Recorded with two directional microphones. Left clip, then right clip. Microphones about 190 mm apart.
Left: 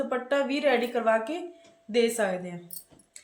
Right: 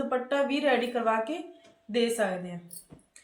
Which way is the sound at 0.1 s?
40° left (ahead or behind).